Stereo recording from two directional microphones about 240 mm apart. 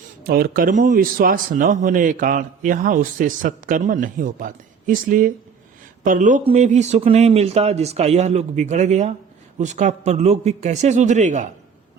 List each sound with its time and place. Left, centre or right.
0.3 s speech: right